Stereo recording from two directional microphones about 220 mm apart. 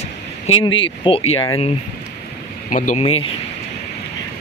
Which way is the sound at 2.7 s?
35° left (ahead or behind).